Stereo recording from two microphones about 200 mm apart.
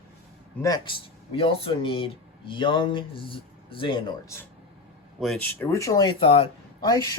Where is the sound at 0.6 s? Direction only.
20° left (ahead or behind).